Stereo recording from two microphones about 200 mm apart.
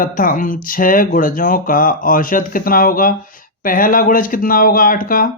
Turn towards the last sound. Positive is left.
turn(degrees=45)  # may be behind; listen again after turning